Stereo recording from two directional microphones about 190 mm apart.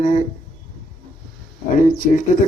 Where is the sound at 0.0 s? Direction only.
40° left (ahead or behind).